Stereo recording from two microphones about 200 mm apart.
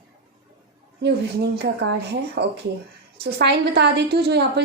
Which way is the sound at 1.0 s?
55° right (ahead or behind).